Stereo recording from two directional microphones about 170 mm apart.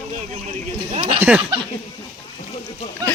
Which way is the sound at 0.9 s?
35° right (ahead or behind).